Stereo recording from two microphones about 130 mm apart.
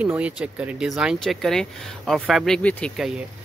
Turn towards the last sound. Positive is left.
turn(degrees=5)  # may be behind; listen again after turning